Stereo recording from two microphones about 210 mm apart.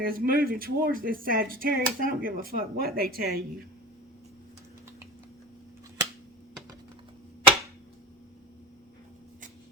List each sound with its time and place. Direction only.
0.0 s speech: 45° right (ahead or behind)